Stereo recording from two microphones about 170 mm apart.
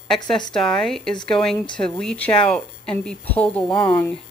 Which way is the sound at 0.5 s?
5° left (ahead or behind).